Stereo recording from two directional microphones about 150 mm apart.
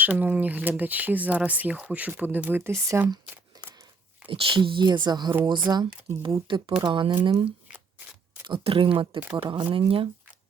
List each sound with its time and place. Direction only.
0.0 s speech: 10° right (ahead or behind)
3.5 s scissors: 25° right (ahead or behind)
4.3 s speech: 35° right (ahead or behind)